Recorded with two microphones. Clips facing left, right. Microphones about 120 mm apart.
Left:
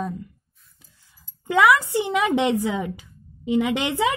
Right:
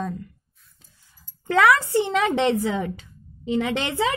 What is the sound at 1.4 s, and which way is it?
A woman's voice, 15° left (ahead or behind).